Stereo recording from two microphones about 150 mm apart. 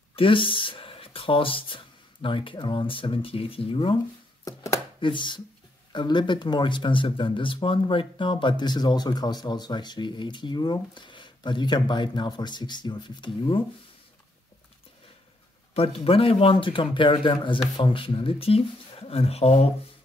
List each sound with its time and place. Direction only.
0.1 s speech: 35° left (ahead or behind)
5.0 s speech: 30° left (ahead or behind)
15.7 s speech: 40° left (ahead or behind)